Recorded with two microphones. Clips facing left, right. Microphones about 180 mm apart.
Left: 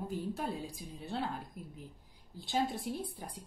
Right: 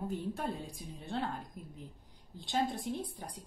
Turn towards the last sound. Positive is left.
turn(degrees=0)  # may be behind; listen again after turning